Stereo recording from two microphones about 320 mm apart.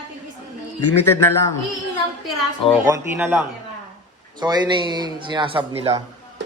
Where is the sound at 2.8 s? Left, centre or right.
Centre.